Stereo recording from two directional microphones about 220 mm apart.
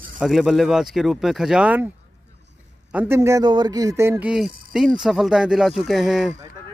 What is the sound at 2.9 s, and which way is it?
A man's voice, 10° right (ahead or behind).